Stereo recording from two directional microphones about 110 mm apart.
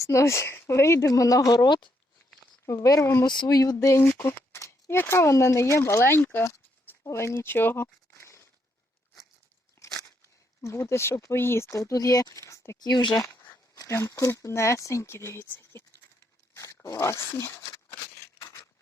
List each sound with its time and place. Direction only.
0.0 s speech: 25° left (ahead or behind)
1.6 s speech: 45° left (ahead or behind)
2.6 s speech: 30° left (ahead or behind)
3.2 s speech: 40° left (ahead or behind)
3.6 s speech: 30° left (ahead or behind)
9.8 s a sound: 25° left (ahead or behind)
10.6 s speech: 25° left (ahead or behind)
12.9 s speech: 45° left (ahead or behind)
13.2 s speech: 30° left (ahead or behind)
17.8 s a sound: 25° left (ahead or behind)